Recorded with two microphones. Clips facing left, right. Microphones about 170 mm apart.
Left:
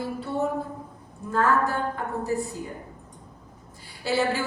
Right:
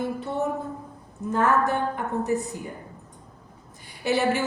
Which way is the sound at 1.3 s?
20° right (ahead or behind).